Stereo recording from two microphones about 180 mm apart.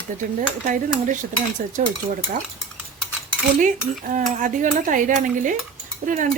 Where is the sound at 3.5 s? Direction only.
45° right (ahead or behind).